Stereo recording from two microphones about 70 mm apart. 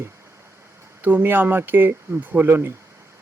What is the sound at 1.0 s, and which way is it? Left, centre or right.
Speech, right.